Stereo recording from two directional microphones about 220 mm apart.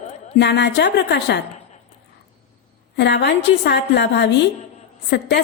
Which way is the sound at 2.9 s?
50° left (ahead or behind).